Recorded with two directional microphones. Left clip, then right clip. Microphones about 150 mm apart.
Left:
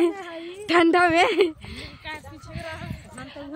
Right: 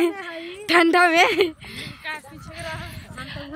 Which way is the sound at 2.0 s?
20° right (ahead or behind).